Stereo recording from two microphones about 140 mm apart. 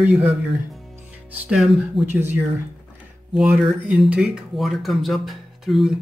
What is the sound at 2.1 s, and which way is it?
A man's voice, 15° right (ahead or behind).